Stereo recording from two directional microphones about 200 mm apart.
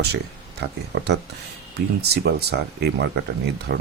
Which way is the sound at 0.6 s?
55° right (ahead or behind).